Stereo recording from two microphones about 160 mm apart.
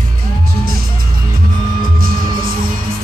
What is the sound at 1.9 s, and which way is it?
Music, 65° right (ahead or behind).